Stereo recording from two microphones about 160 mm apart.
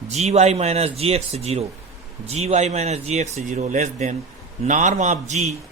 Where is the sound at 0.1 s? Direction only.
45° right (ahead or behind).